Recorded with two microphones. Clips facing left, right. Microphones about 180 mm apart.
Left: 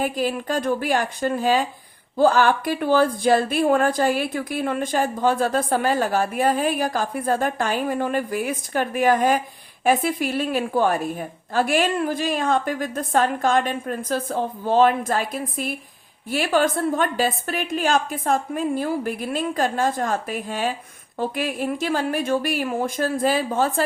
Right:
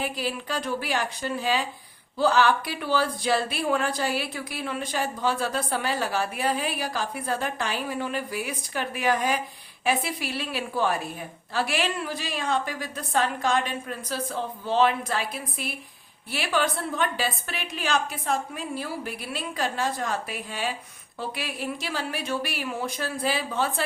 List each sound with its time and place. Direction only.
0.0 s a woman's voice: 45° left (ahead or behind)